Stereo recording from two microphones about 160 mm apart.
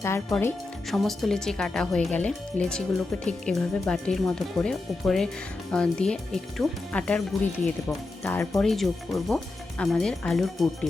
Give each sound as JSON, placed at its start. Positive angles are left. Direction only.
{"t": 0.0, "sound": "speech", "side_deg": 15}
{"t": 0.9, "sound": "speech", "side_deg": 0}